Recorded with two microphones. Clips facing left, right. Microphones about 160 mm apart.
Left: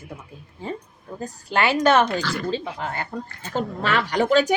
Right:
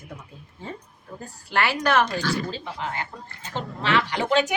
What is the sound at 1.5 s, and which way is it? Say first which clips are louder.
Speech: left 4 dB; 20° left (ahead or behind).